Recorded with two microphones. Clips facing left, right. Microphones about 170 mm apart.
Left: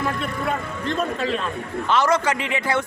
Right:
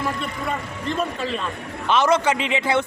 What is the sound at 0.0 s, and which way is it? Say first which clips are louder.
A man's voice: left 2 dB; centre (ahead or behind).